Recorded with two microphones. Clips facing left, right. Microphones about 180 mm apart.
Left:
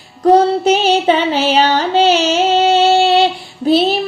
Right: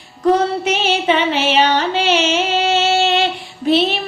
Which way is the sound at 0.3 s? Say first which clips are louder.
Left 6 dB; 35° left (ahead or behind).